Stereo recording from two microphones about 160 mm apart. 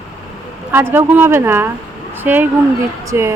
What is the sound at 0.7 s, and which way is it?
A woman's voice, 15° right (ahead or behind).